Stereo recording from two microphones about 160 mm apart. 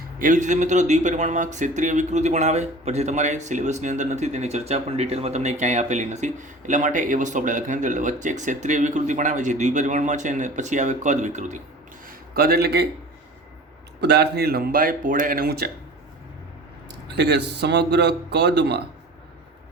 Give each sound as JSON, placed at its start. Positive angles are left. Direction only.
{"t": 0.2, "sound": "speech", "side_deg": -55}
{"t": 12.0, "sound": "a man's voice", "side_deg": -70}
{"t": 14.0, "sound": "speech", "side_deg": -90}
{"t": 17.2, "sound": "a man's voice", "side_deg": -90}